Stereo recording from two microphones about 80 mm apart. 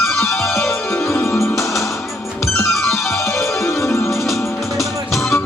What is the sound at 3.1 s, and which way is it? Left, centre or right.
Music, left.